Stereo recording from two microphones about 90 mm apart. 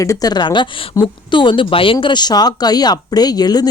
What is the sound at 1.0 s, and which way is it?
Speech, 40° left (ahead or behind).